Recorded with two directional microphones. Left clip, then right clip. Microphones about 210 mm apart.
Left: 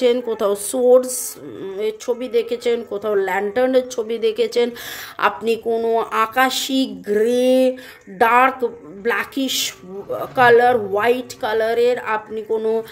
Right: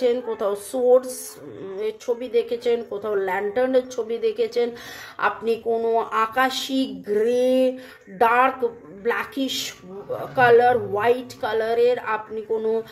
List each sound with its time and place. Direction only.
0.0 s a woman's voice: 30° left (ahead or behind)